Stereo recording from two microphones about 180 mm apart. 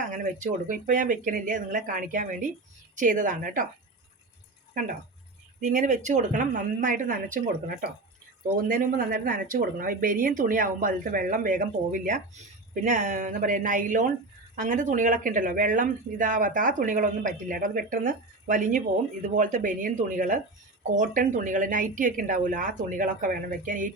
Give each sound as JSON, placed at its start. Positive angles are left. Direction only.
{"t": 0.7, "sound": "speech", "side_deg": -45}
{"t": 4.7, "sound": "speech", "side_deg": -50}